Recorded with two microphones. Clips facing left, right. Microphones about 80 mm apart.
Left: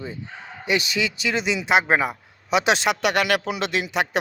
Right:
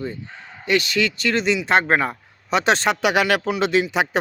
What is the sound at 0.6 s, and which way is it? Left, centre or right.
Speech, centre.